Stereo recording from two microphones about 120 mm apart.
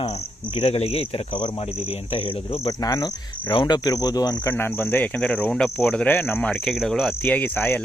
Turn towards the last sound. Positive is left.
turn(degrees=15)  # may be behind; listen again after turning